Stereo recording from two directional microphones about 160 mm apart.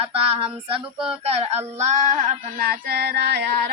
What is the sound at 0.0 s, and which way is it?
Female singing, 40° right (ahead or behind).